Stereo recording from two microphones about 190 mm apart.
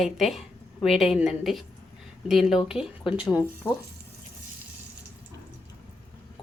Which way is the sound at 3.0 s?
25° left (ahead or behind).